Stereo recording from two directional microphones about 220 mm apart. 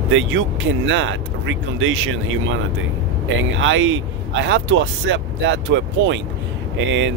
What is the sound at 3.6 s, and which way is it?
Speech, 60° right (ahead or behind).